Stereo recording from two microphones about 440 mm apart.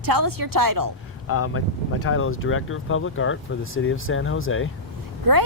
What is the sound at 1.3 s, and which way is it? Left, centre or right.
Speech, left.